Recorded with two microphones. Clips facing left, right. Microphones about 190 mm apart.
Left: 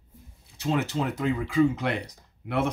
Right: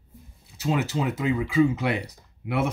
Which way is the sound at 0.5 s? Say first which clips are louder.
Right 1 dB; 5° right (ahead or behind).